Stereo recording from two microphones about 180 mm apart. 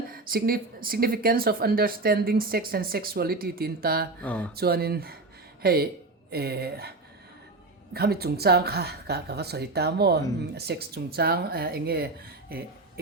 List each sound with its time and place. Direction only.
0.1 s speech: 55° right (ahead or behind)
4.2 s a sound: 5° left (ahead or behind)
4.5 s speech: 60° right (ahead or behind)
7.9 s speech: 60° right (ahead or behind)